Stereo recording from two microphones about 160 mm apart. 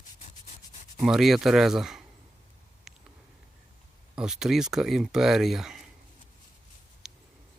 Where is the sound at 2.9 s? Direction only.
5° right (ahead or behind).